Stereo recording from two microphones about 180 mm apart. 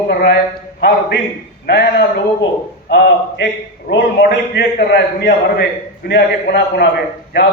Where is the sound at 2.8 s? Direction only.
70° left (ahead or behind).